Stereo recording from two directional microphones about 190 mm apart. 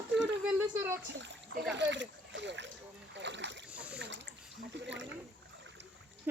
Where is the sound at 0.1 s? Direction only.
70° right (ahead or behind).